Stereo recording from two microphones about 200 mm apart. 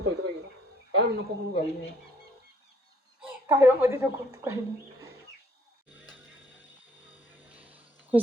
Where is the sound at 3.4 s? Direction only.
10° right (ahead or behind).